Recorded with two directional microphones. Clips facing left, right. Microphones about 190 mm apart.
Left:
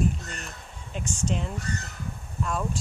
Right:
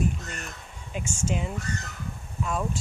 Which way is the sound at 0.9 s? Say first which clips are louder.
Even; 5° right (ahead or behind).